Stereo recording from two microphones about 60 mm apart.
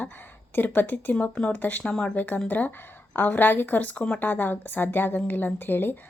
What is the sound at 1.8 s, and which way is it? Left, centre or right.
Speech, centre.